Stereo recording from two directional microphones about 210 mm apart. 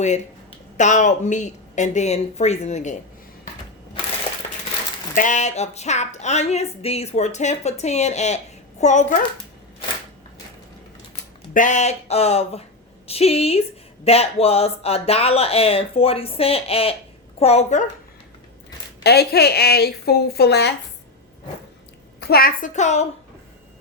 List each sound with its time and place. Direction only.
0.8 s a woman's voice: 35° left (ahead or behind)
5.1 s a woman's voice: 35° left (ahead or behind)
11.5 s a woman's voice: 35° left (ahead or behind)
19.0 s speech: 50° left (ahead or behind)
22.2 s a woman's voice: 45° left (ahead or behind)